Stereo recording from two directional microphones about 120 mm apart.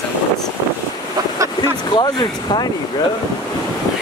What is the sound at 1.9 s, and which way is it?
Speech, 40° left (ahead or behind).